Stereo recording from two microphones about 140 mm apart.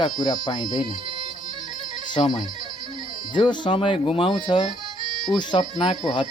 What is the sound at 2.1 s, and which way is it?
Speech, 30° left (ahead or behind).